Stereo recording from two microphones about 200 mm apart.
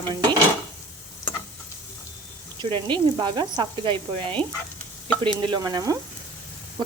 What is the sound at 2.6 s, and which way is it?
A woman's voice, 20° right (ahead or behind).